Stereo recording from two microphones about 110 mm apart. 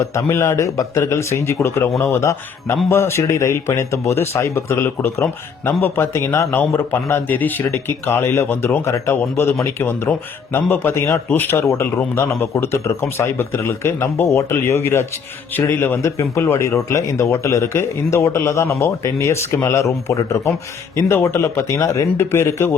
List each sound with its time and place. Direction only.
0.0 s a man's voice: 25° left (ahead or behind)